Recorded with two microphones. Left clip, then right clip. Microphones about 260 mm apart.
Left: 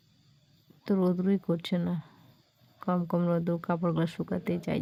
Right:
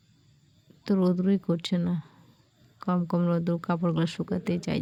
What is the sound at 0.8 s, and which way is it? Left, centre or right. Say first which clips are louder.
Speech: right 2 dB; centre.